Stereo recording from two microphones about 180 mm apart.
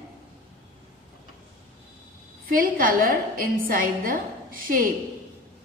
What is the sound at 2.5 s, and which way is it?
A woman's voice, 50° right (ahead or behind).